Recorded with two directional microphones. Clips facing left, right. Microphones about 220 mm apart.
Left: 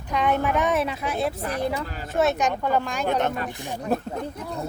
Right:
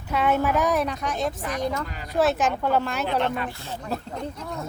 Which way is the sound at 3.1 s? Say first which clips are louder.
Left 3 dB; 45° left (ahead or behind).